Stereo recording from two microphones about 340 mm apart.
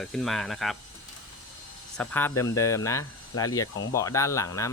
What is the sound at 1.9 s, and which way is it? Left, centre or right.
Speech, centre.